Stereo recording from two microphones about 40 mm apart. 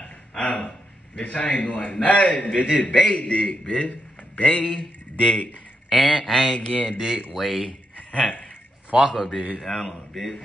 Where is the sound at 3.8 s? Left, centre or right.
Left.